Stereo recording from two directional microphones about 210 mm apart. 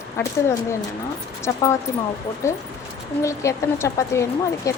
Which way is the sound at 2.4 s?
15° left (ahead or behind).